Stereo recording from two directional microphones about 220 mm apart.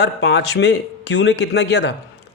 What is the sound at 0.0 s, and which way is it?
Speech, 50° left (ahead or behind).